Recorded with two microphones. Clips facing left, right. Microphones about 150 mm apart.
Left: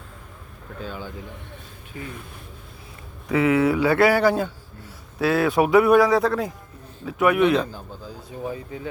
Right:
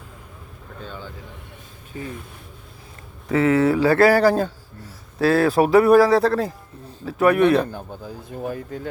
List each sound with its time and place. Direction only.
0.8 s speech: 10° left (ahead or behind)
1.9 s a man's voice: 35° right (ahead or behind)
3.2 s a man's voice: 35° right (ahead or behind)
7.5 s speech: 60° right (ahead or behind)